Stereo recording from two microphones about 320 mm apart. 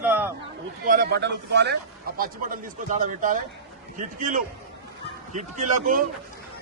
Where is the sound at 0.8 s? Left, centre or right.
Right.